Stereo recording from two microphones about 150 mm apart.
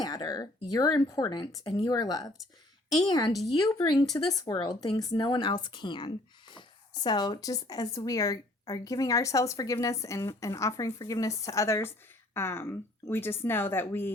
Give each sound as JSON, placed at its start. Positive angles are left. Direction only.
{"t": 0.0, "sound": "speech", "side_deg": 25}